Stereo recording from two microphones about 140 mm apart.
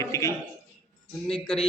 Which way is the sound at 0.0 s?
20° left (ahead or behind).